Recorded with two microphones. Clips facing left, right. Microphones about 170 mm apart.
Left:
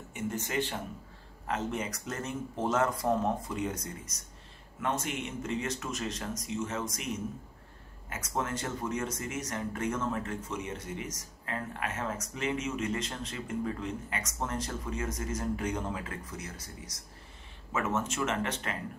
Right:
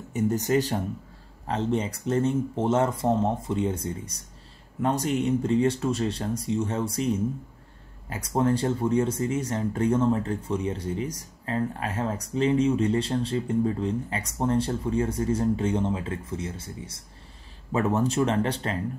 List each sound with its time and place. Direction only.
0.1 s speech: 40° right (ahead or behind)